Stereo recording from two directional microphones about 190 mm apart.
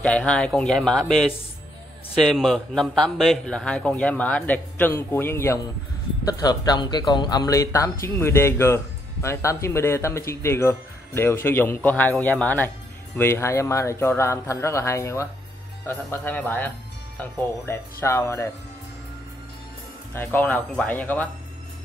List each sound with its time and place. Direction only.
0.0 s a man's voice: 5° left (ahead or behind)
2.2 s a man's voice: centre (ahead or behind)
20.2 s speech: 10° left (ahead or behind)